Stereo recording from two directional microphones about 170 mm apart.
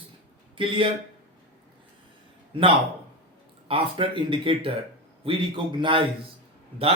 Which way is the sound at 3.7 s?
30° right (ahead or behind).